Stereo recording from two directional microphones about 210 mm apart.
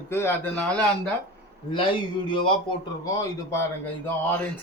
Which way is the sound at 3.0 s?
15° left (ahead or behind).